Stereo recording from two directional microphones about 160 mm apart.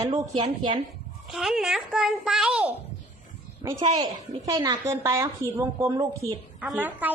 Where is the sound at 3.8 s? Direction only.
35° right (ahead or behind).